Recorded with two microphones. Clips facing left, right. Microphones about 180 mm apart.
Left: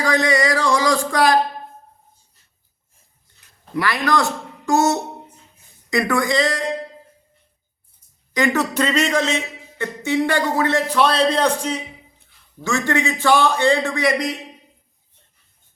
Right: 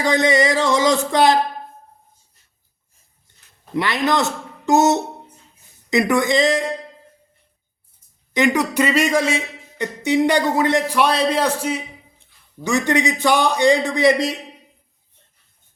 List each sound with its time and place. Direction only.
0.0 s music: 20° right (ahead or behind)
3.8 s music: 20° right (ahead or behind)
8.3 s a man's voice: 20° right (ahead or behind)